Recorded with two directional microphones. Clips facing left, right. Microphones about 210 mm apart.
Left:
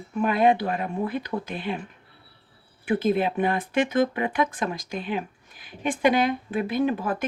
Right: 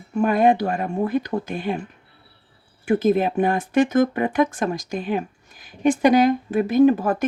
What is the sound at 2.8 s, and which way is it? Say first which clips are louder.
Speech: right 4 dB; 45° right (ahead or behind).